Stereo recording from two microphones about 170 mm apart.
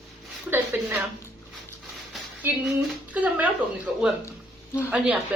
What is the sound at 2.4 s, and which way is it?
Speech, 15° right (ahead or behind).